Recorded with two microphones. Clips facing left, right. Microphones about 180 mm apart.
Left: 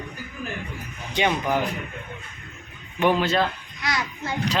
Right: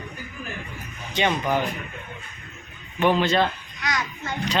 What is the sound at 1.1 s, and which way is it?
Speech, 10° left (ahead or behind).